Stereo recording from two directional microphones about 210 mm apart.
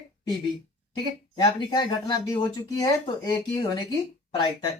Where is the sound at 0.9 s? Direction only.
20° left (ahead or behind).